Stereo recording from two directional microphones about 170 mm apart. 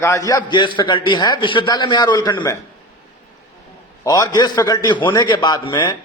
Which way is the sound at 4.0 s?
20° left (ahead or behind).